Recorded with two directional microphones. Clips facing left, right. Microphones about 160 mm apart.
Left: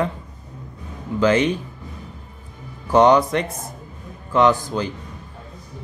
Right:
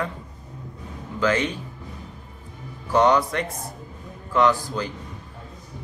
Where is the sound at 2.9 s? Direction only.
20° left (ahead or behind).